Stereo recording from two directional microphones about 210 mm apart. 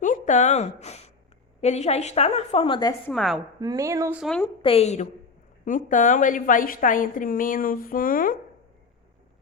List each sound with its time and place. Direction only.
0.0 s a sound: 35° left (ahead or behind)
1.6 s a woman's voice: 30° left (ahead or behind)
3.1 s a woman's voice: centre (ahead or behind)
3.6 s speech: 15° right (ahead or behind)
4.2 s a woman's voice: 5° left (ahead or behind)
4.6 s a woman's voice: 30° left (ahead or behind)